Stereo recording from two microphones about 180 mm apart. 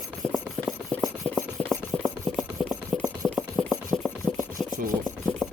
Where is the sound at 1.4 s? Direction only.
10° left (ahead or behind).